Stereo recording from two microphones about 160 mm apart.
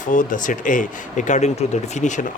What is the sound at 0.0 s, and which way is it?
Speech, 55° left (ahead or behind).